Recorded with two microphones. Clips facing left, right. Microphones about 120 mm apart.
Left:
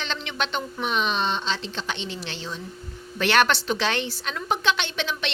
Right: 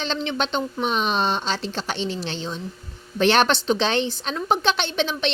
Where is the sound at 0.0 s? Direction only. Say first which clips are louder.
Right 5 dB; 30° right (ahead or behind).